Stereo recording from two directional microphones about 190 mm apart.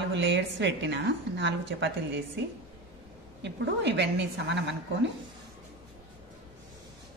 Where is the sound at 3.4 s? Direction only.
65° right (ahead or behind).